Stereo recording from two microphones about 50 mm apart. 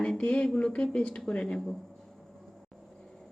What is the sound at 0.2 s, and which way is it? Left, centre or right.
Speech, left.